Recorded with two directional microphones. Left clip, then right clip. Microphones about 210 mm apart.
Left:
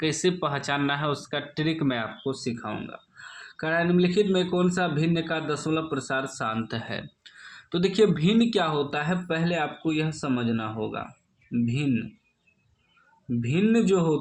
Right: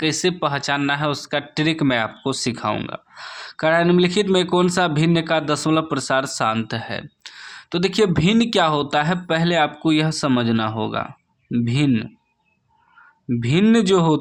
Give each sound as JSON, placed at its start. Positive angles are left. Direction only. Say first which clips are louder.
{"t": 0.0, "sound": "speech", "louder": "right 5 dB", "side_deg": -20}
{"t": 13.4, "sound": "speech", "louder": "right 6 dB", "side_deg": -45}